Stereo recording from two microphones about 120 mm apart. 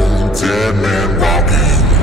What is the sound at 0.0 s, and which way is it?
Music, centre (ahead or behind).